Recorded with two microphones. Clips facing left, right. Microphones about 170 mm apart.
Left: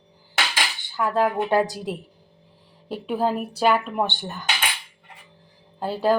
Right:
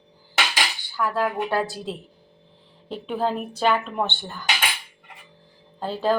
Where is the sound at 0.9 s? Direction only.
20° left (ahead or behind).